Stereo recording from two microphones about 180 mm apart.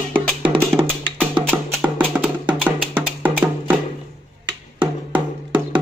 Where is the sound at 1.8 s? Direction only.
10° right (ahead or behind).